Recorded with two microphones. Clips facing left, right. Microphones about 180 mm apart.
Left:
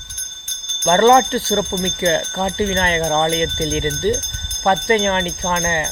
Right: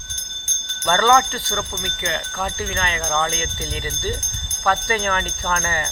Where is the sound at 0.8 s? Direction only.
25° left (ahead or behind).